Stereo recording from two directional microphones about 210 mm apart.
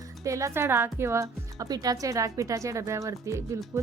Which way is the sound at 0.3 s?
15° right (ahead or behind).